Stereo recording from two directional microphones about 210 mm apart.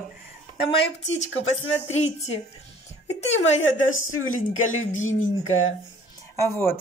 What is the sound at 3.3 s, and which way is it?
A woman's voice, 65° left (ahead or behind).